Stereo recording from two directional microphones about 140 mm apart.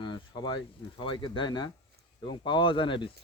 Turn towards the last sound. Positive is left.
turn(degrees=35)  # may be behind; listen again after turning